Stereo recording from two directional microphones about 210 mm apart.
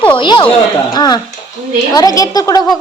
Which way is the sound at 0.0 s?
20° left (ahead or behind).